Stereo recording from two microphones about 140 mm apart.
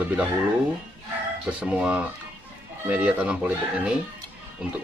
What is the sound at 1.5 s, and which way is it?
Speech, 10° right (ahead or behind).